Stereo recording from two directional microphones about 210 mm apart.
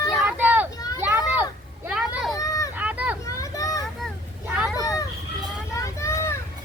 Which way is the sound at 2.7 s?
5° right (ahead or behind).